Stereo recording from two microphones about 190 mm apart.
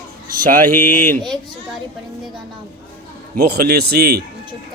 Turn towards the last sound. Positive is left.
turn(degrees=-55)  # may be behind; listen again after turning